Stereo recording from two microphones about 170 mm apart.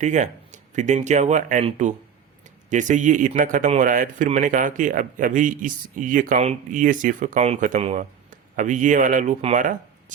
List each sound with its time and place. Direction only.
0.0 s speech: 45° right (ahead or behind)